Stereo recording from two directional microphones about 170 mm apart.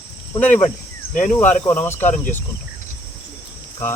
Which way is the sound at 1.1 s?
45° left (ahead or behind).